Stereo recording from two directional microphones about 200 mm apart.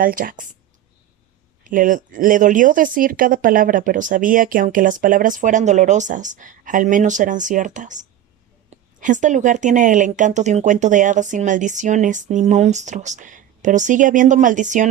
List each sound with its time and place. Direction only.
0.0 s speech: 45° right (ahead or behind)
1.6 s speech: 40° right (ahead or behind)